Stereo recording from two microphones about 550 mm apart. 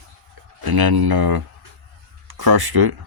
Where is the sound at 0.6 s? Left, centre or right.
Right.